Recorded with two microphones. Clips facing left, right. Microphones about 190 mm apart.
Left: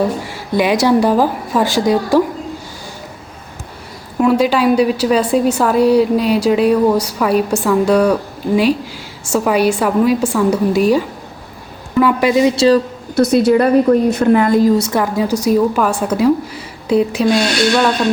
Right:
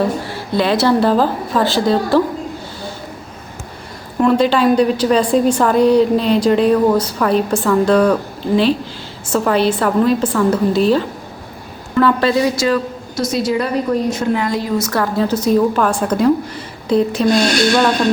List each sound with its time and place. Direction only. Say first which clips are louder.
0.3 s a woman's voice: left 1 dB; 15° left (ahead or behind)
4.2 s a woman's voice: even; 5° left (ahead or behind); by 12.8 s 30° left (ahead or behind)
13.1 s a woman's voice: left 7 dB; 60° left (ahead or behind)
14.9 s a woman's voice: left 1 dB; 15° left (ahead or behind)